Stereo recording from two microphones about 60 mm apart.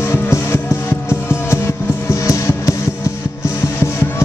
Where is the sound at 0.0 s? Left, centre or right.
Left.